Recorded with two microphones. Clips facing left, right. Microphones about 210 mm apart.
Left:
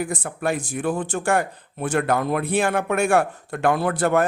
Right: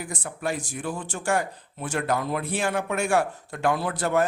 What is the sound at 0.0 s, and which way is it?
Speech, 55° left (ahead or behind).